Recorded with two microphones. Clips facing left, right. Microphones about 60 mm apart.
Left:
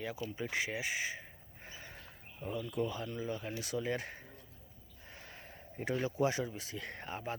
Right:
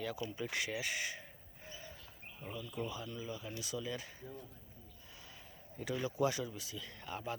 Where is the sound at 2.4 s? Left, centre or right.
Left.